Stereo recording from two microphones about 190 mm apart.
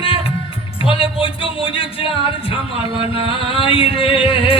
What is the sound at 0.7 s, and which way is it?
Speech, 30° left (ahead or behind).